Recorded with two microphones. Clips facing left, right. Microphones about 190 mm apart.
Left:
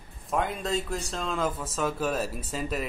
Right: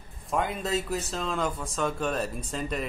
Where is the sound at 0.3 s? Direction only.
Centre (ahead or behind).